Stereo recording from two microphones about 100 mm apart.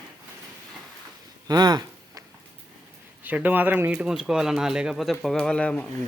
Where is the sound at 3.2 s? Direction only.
15° right (ahead or behind).